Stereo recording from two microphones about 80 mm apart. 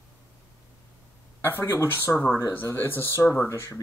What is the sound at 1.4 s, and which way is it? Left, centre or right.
Speech, left.